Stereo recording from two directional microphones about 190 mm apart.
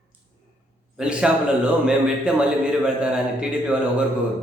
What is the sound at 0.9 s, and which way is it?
A man's voice, 5° right (ahead or behind).